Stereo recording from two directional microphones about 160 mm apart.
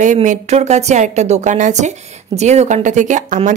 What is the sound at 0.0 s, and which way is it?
A woman's voice, 50° right (ahead or behind).